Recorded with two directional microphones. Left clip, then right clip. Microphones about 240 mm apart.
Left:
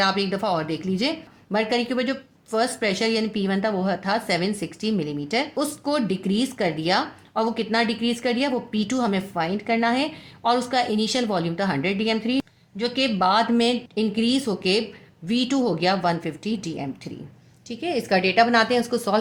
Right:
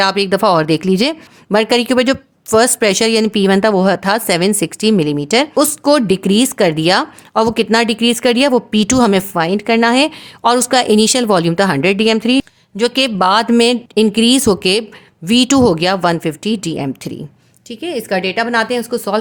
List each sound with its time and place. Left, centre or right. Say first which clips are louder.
0.0 s a woman's voice: right 10 dB; right